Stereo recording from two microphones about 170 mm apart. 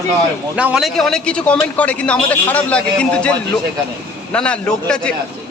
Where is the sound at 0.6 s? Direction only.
5° right (ahead or behind).